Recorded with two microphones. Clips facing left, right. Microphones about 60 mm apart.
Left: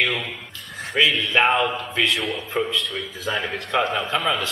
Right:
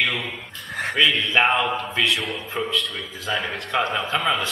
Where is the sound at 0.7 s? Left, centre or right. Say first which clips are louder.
Right 7 dB; right.